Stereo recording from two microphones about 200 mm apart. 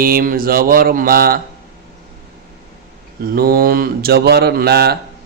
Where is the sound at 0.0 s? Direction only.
45° right (ahead or behind).